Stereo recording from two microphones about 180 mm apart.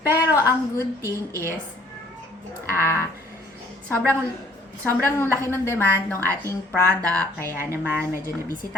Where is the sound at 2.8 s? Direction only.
15° left (ahead or behind).